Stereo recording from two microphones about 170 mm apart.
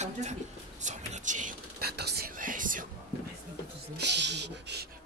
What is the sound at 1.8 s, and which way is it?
Speech, 70° right (ahead or behind).